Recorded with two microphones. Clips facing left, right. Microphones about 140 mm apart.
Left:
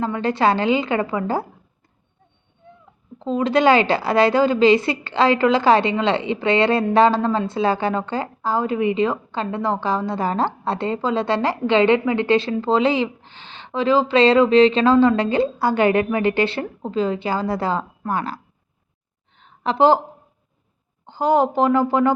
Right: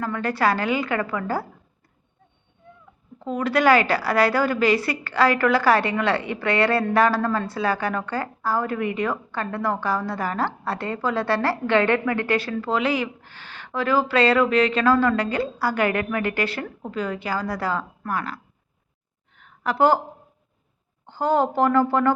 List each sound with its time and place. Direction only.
0.0 s a woman's voice: 25° left (ahead or behind)
3.2 s a woman's voice: 25° left (ahead or behind)
19.4 s a sound: 25° left (ahead or behind)
21.1 s speech: 15° left (ahead or behind)